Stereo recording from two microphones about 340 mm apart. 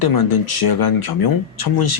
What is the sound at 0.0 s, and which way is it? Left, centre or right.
Speech, left.